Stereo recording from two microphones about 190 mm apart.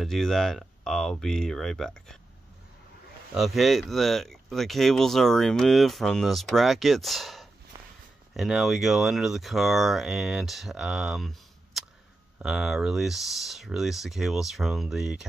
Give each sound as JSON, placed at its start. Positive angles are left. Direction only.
{"t": 0.0, "sound": "speech", "side_deg": 0}
{"t": 3.3, "sound": "speech", "side_deg": 0}
{"t": 7.7, "sound": "a sound", "side_deg": -20}
{"t": 8.4, "sound": "speech", "side_deg": 0}